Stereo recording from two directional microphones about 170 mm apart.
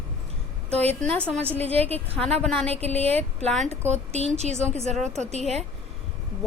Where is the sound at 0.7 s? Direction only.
35° right (ahead or behind).